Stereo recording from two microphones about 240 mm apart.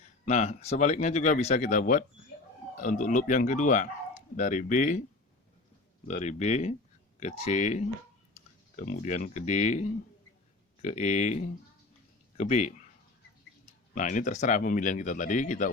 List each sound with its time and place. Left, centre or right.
0.3 s speech: left
6.1 s speech: left
10.8 s speech: left
13.9 s speech: left